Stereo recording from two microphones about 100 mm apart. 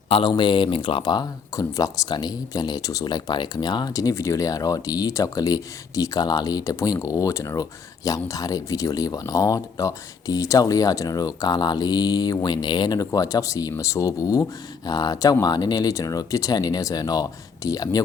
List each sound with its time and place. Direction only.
0.1 s speech: 55° left (ahead or behind)
13.1 s speech: 35° left (ahead or behind)